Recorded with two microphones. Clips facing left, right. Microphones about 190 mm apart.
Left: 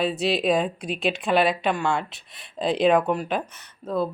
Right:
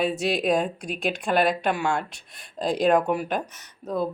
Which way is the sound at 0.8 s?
50° right (ahead or behind).